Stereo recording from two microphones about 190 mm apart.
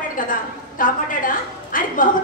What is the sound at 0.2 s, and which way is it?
A woman's voice, 45° left (ahead or behind).